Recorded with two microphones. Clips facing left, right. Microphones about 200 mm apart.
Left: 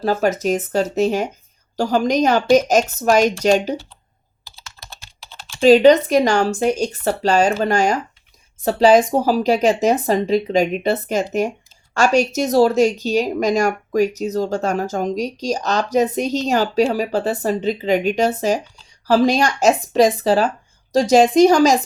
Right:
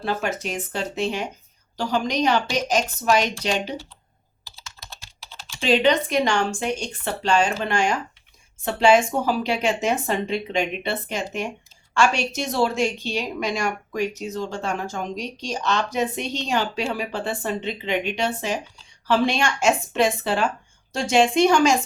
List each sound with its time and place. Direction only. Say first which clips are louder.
0.0 s a woman's voice: left 8 dB; 40° left (ahead or behind)
5.4 s a woman's voice: left 10 dB; 50° left (ahead or behind)